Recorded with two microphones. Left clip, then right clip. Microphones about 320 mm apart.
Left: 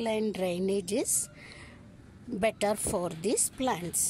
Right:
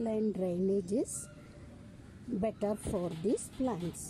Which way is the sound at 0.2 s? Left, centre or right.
Left.